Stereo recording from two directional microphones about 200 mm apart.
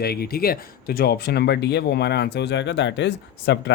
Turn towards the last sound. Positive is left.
turn(degrees=60)  # may be behind; listen again after turning